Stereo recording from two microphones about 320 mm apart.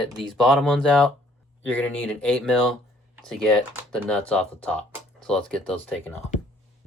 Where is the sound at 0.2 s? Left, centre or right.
Centre.